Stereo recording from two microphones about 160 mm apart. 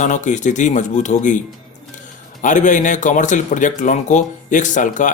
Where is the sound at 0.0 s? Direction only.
50° left (ahead or behind).